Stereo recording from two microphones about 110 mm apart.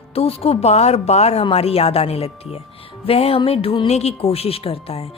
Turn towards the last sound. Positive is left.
turn(degrees=65)  # may be behind; listen again after turning